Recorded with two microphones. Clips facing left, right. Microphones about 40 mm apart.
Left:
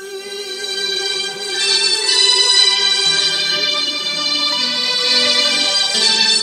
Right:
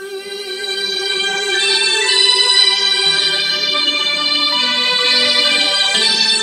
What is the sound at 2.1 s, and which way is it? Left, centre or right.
Music, centre.